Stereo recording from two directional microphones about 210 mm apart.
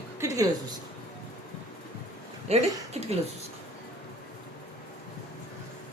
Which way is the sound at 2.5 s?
30° right (ahead or behind).